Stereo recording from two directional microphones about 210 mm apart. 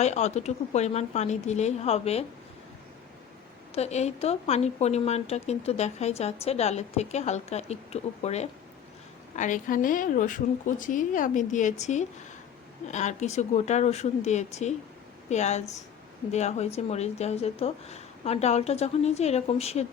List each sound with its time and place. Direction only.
0.0 s speech: 35° left (ahead or behind)
3.8 s speech: 30° left (ahead or behind)